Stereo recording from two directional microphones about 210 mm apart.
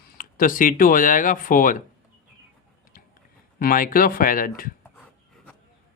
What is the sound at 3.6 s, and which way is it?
Speech, 40° left (ahead or behind).